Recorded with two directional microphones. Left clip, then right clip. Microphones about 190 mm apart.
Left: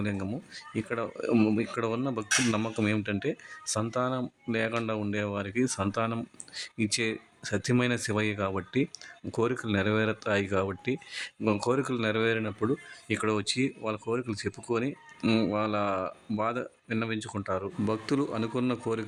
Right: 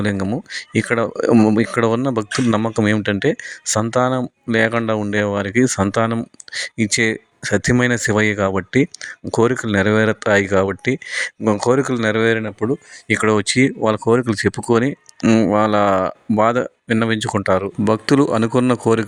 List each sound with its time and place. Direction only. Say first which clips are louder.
0.0 s speech: right 13 dB; 40° right (ahead or behind)